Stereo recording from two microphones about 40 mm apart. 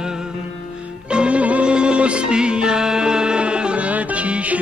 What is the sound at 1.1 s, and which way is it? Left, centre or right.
Music, right.